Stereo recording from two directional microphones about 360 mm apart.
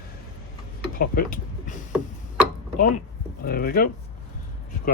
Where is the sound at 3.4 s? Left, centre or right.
Left.